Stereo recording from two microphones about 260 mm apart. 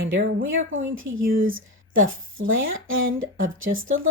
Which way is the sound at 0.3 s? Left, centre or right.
Right.